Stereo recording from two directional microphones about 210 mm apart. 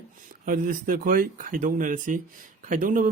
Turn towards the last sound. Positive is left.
turn(degrees=-40)  # may be behind; listen again after turning